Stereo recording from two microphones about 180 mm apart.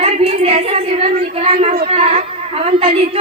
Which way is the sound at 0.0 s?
35° right (ahead or behind).